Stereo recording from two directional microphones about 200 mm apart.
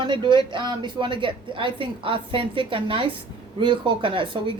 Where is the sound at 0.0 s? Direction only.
25° right (ahead or behind).